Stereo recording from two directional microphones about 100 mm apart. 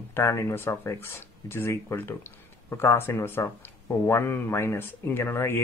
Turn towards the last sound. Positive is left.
turn(degrees=25)  # may be behind; listen again after turning